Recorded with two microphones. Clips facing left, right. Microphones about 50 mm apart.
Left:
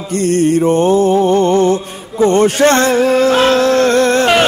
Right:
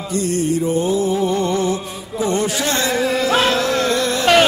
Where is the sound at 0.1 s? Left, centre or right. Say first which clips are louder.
Left 7 dB; left.